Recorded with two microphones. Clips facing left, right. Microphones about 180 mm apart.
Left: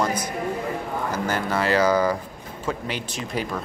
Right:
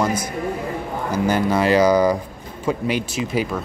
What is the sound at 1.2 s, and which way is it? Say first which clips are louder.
Speech: right 7 dB; 15° right (ahead or behind).